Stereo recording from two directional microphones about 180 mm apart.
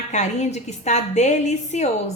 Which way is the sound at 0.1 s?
40° left (ahead or behind).